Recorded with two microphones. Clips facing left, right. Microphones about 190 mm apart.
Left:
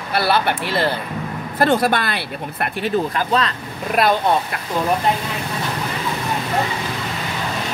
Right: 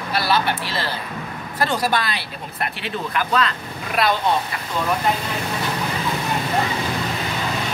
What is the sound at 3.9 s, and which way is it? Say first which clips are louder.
Speech: left 3 dB; 50° left (ahead or behind).